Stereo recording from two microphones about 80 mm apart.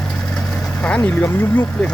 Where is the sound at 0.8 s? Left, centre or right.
Centre.